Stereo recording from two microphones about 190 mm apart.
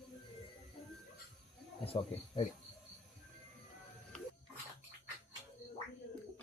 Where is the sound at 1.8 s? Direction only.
30° left (ahead or behind).